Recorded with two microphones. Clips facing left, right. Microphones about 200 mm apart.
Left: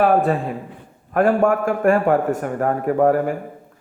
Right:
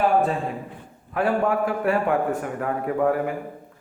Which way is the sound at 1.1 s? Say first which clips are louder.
Left 6 dB; 50° left (ahead or behind).